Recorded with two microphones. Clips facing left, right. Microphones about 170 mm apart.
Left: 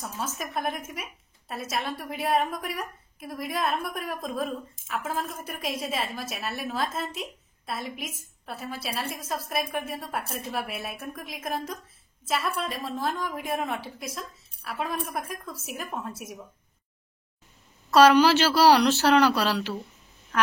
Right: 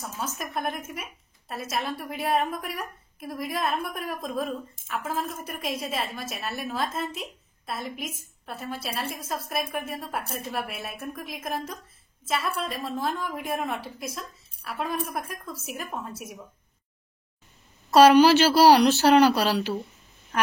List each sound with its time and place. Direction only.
0.0 s a woman's voice: centre (ahead or behind)
17.9 s speech: 15° right (ahead or behind)